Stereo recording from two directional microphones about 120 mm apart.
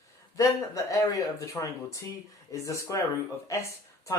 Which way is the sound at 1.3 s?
25° left (ahead or behind).